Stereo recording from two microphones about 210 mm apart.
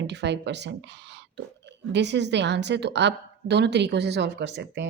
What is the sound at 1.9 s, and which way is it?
A woman's voice, 55° right (ahead or behind).